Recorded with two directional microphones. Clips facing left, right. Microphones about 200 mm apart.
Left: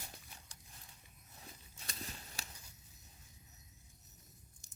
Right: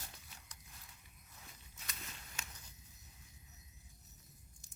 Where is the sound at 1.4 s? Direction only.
30° left (ahead or behind).